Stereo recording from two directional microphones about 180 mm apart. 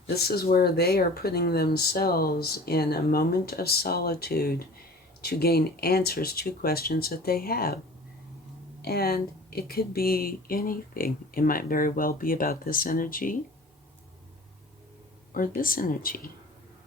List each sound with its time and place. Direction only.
0.2 s speech: 60° left (ahead or behind)
8.8 s speech: 60° left (ahead or behind)
15.3 s speech: 50° left (ahead or behind)